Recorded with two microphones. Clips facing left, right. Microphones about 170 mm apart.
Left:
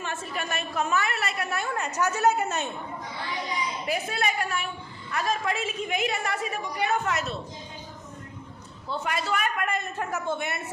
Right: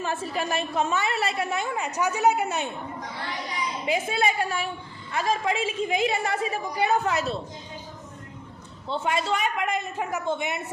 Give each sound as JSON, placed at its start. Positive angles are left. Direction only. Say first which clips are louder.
{"t": 0.0, "sound": "a woman's voice", "louder": "right 5 dB", "side_deg": -30}
{"t": 3.8, "sound": "a woman's voice", "louder": "right 5 dB", "side_deg": -25}
{"t": 8.9, "sound": "a man's voice", "louder": "right 3 dB", "side_deg": -25}